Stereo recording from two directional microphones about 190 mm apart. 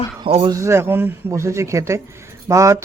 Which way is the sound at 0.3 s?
30° right (ahead or behind).